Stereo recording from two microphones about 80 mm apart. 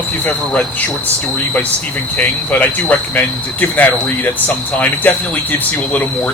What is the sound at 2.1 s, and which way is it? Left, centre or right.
Speech, left.